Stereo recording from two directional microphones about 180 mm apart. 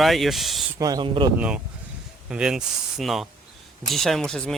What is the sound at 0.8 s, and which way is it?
Speech, 20° right (ahead or behind).